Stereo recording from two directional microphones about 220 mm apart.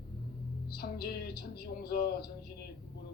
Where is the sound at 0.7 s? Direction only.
45° left (ahead or behind).